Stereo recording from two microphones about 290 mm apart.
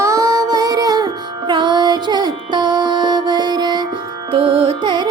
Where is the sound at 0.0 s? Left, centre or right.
Centre.